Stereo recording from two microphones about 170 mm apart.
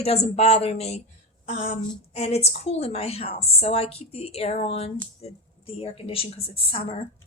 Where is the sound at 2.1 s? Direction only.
40° left (ahead or behind).